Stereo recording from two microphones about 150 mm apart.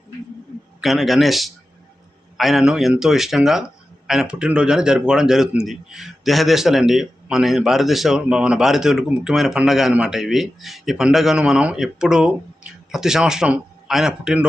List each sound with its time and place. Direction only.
0.8 s speech: centre (ahead or behind)